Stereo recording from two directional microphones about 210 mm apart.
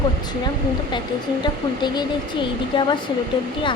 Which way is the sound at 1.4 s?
20° left (ahead or behind).